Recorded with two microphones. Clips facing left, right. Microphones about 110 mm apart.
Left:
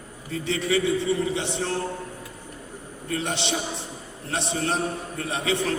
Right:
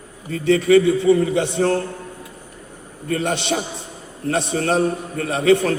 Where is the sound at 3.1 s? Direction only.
50° right (ahead or behind).